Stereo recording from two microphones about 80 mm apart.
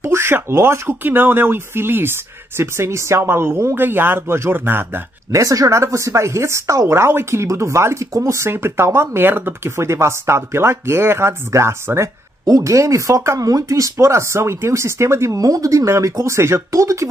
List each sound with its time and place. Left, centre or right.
0.0 s speech: right
5.3 s speech: right
12.4 s speech: right